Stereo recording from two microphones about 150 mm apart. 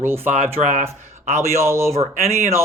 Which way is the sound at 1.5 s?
20° right (ahead or behind).